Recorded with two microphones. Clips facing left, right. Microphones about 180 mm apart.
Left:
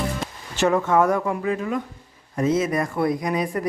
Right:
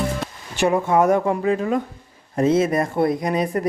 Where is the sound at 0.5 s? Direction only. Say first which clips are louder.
Right 1 dB; 15° right (ahead or behind).